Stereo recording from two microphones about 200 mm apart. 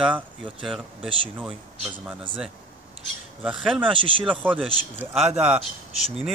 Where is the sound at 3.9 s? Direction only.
25° right (ahead or behind).